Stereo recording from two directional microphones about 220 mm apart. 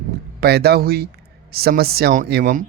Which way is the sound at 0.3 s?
45° right (ahead or behind).